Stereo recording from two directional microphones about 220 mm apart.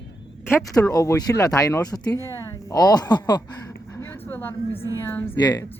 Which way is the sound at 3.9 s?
10° left (ahead or behind).